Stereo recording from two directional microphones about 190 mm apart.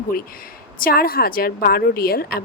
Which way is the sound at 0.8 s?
50° left (ahead or behind).